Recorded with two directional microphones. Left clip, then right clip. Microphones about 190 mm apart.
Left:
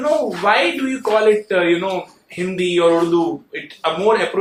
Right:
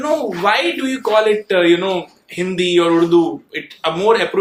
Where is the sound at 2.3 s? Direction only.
55° right (ahead or behind).